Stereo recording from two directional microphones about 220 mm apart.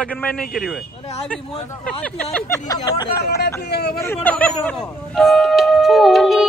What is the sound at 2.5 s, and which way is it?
Speech, 15° left (ahead or behind).